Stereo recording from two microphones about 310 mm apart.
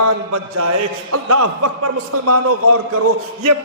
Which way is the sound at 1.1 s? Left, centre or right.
Right.